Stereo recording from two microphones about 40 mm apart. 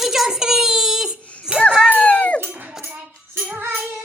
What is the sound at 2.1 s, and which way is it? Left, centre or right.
Dog, left.